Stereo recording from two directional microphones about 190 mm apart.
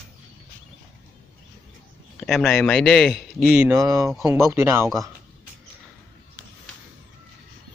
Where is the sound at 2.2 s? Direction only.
Centre (ahead or behind).